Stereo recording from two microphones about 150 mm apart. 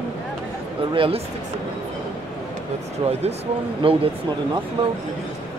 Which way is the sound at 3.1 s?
45° right (ahead or behind).